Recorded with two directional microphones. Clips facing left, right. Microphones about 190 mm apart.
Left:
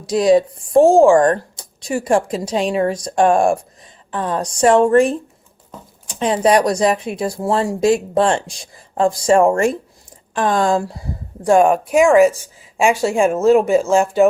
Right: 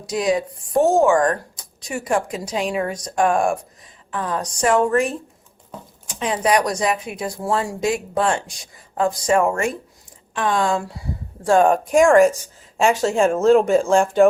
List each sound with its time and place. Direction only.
0.0 s speech: 35° left (ahead or behind)
11.4 s speech: 10° left (ahead or behind)